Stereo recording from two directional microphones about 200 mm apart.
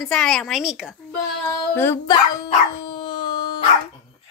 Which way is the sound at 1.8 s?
15° left (ahead or behind).